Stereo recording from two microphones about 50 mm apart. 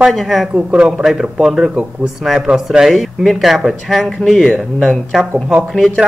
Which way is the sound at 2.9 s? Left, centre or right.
Centre.